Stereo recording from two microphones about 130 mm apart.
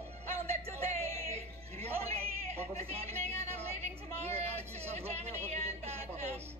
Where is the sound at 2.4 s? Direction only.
55° right (ahead or behind).